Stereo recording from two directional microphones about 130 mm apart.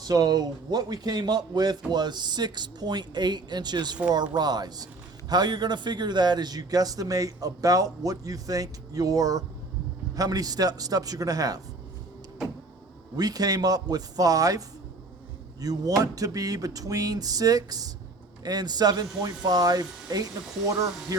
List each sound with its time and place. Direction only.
0.0 s a man's voice: 30° right (ahead or behind)
13.1 s speech: 30° right (ahead or behind)
15.6 s a man's voice: 30° right (ahead or behind)